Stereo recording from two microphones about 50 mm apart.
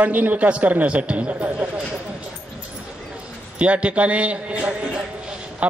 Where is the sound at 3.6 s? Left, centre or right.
Right.